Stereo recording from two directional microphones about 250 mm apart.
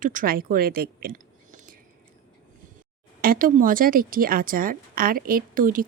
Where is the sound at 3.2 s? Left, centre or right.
Right.